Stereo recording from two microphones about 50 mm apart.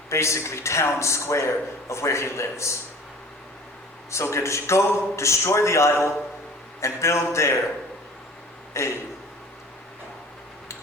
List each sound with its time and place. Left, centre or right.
0.1 s a man's voice: left
4.1 s a man's voice: left
8.7 s a man's voice: left